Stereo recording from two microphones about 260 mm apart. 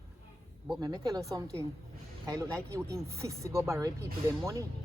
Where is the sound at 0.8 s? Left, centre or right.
Centre.